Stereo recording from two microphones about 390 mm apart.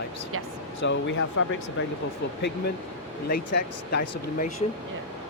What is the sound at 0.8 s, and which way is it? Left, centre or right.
Speech, left.